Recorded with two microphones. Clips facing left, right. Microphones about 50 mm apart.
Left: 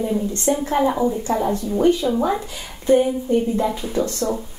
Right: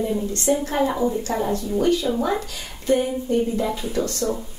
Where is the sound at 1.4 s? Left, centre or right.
Left.